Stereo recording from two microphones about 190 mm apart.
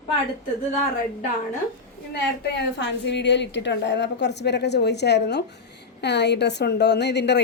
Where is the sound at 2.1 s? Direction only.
65° left (ahead or behind).